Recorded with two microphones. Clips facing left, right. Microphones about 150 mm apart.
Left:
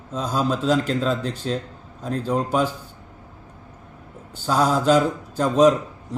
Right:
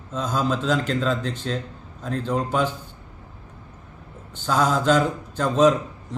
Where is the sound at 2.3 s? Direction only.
10° left (ahead or behind).